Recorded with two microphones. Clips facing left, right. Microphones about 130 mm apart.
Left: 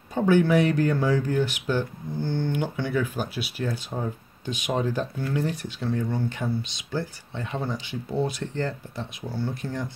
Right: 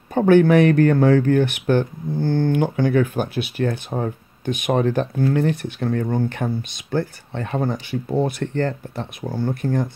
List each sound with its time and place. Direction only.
0.1 s speech: 55° right (ahead or behind)